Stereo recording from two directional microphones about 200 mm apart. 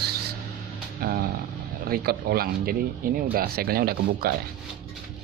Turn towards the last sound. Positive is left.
turn(degrees=-50)  # may be behind; listen again after turning